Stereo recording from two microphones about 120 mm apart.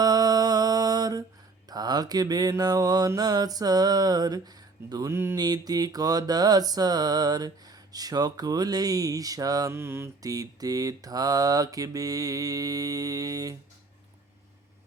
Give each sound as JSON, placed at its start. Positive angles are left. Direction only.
{"t": 0.0, "sound": "mantra", "side_deg": -30}
{"t": 5.1, "sound": "mantra", "side_deg": -20}
{"t": 5.4, "sound": "mantra", "side_deg": -35}